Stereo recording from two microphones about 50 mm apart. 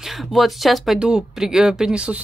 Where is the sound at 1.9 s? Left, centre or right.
Right.